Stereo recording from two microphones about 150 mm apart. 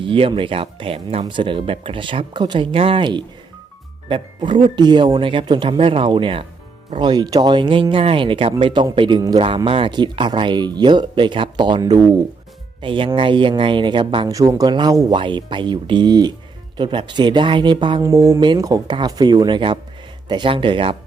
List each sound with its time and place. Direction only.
0.0 s speech: 35° right (ahead or behind)
14.3 s speech: 25° right (ahead or behind)